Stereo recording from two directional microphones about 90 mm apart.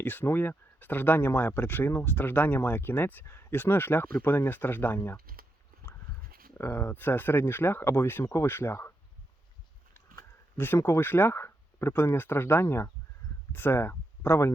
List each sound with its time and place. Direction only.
0.0 s speech: 20° left (ahead or behind)
6.6 s speech: 30° left (ahead or behind)
9.9 s speech: 25° left (ahead or behind)